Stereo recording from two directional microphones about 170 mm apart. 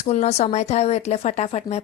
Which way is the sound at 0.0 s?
40° left (ahead or behind).